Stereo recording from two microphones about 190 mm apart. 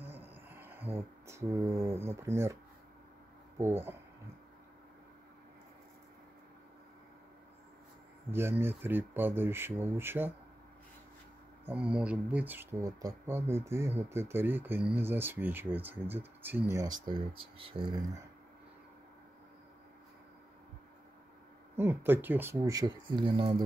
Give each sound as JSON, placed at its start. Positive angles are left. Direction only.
{"t": 0.0, "sound": "a sound", "side_deg": -10}
{"t": 3.5, "sound": "speech", "side_deg": -15}
{"t": 8.3, "sound": "speech", "side_deg": -10}
{"t": 11.6, "sound": "speech", "side_deg": -5}
{"t": 21.7, "sound": "speech", "side_deg": -10}